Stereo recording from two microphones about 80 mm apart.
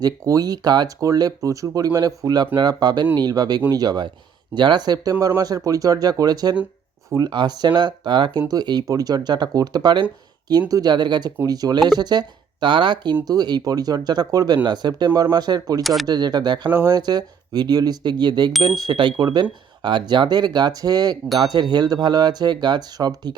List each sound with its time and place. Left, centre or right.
0.0 s speech: right
4.5 s speech: right
8.4 s speech: right
11.4 s speech: right
13.2 s speech: right
15.8 s speech: centre
16.0 s speech: right
18.9 s speech: right
19.2 s speech: right